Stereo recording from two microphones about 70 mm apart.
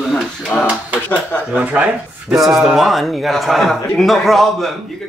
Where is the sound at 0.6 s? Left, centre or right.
Right.